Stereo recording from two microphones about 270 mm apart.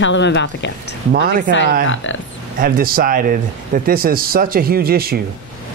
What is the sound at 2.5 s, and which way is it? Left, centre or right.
Speech, right.